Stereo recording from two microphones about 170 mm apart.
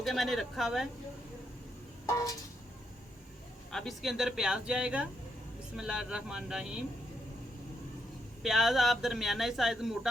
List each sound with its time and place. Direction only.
0.0 s speech: centre (ahead or behind)
3.7 s speech: centre (ahead or behind)
8.4 s speech: centre (ahead or behind)